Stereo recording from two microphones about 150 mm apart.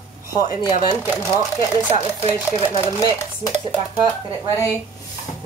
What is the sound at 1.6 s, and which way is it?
Speech, 35° right (ahead or behind).